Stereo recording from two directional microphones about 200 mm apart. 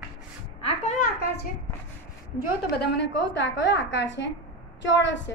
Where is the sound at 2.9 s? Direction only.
60° left (ahead or behind).